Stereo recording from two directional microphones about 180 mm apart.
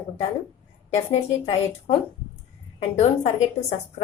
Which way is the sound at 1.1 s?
35° left (ahead or behind).